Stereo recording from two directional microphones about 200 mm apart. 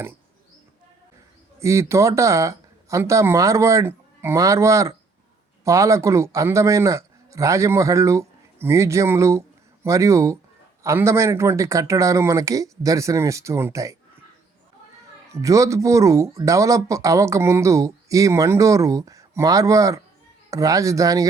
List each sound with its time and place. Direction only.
1.5 s speech: 15° right (ahead or behind)
15.3 s speech: 15° right (ahead or behind)